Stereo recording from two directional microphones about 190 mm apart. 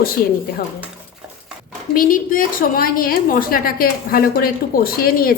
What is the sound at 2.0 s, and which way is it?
A woman's voice, 45° left (ahead or behind).